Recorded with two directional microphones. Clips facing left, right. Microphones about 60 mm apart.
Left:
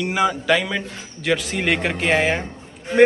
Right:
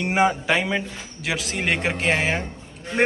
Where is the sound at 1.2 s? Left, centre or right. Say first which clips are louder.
Left 4 dB; centre.